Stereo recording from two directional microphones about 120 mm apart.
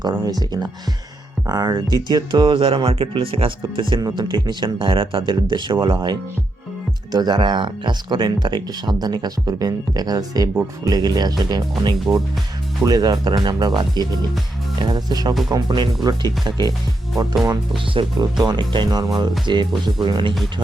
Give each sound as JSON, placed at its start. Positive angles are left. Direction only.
{"t": 0.0, "sound": "speech", "side_deg": -35}
{"t": 12.8, "sound": "speech", "side_deg": -30}
{"t": 17.9, "sound": "speech", "side_deg": -35}